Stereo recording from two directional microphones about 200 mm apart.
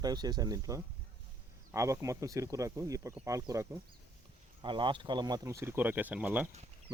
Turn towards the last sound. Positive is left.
turn(degrees=-5)  # may be behind; listen again after turning